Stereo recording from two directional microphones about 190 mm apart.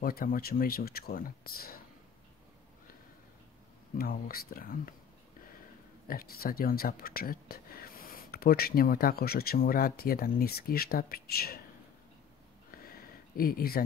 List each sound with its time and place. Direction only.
0.0 s speech: 50° left (ahead or behind)
4.0 s speech: 50° left (ahead or behind)
6.0 s speech: 50° left (ahead or behind)
12.7 s a sound: 50° left (ahead or behind)